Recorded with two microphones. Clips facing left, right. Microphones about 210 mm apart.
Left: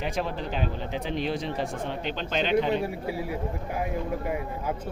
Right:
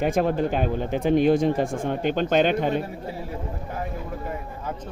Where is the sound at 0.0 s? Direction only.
50° right (ahead or behind).